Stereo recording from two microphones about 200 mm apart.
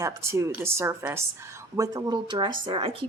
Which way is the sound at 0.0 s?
15° right (ahead or behind).